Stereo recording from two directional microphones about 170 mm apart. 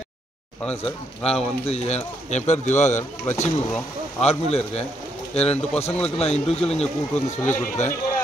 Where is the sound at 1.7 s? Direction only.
40° left (ahead or behind).